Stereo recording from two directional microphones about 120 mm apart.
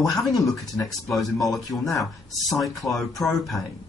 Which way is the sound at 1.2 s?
Centre (ahead or behind).